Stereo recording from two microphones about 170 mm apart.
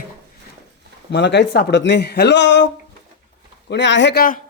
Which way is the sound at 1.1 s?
90° left.